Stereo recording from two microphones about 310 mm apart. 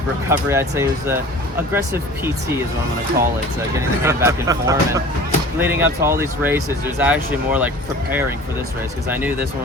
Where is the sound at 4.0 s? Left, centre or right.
Centre.